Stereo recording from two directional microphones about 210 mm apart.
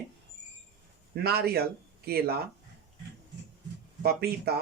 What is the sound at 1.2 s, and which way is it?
Speech, 50° right (ahead or behind).